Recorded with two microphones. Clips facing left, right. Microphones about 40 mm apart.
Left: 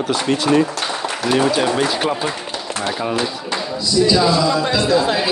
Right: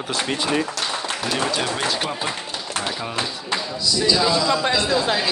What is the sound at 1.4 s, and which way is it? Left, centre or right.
A man's voice, centre.